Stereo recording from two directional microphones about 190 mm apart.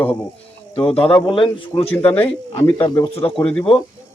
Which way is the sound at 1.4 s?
30° left (ahead or behind).